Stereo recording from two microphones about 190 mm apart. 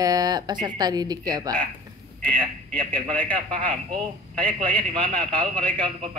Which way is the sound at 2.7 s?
5° left (ahead or behind).